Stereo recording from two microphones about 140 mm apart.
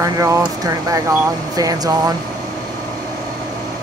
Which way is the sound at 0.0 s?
25° right (ahead or behind).